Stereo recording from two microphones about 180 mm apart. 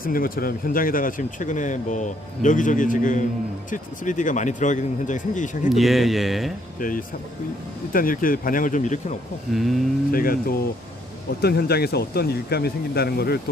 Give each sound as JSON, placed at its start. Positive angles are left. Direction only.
{"t": 0.0, "sound": "speech", "side_deg": 55}
{"t": 5.6, "sound": "a man's voice", "side_deg": 0}
{"t": 6.7, "sound": "speech", "side_deg": 50}
{"t": 9.5, "sound": "a man's voice", "side_deg": 0}
{"t": 10.1, "sound": "speech", "side_deg": 55}